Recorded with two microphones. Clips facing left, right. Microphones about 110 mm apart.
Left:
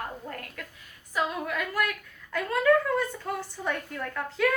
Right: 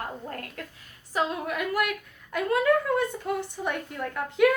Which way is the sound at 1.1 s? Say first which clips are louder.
Right 2 dB; 20° right (ahead or behind).